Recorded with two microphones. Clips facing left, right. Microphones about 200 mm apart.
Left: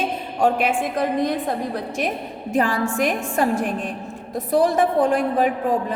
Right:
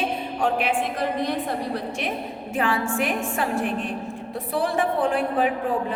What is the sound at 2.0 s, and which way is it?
A woman's voice, 40° left (ahead or behind).